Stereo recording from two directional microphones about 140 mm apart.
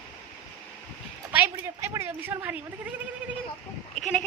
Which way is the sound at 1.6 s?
20° right (ahead or behind).